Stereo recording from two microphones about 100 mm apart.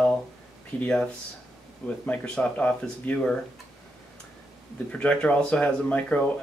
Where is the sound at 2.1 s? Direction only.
10° left (ahead or behind).